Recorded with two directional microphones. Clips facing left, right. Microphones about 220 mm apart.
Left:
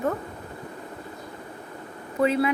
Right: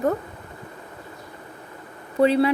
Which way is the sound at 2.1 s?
35° right (ahead or behind).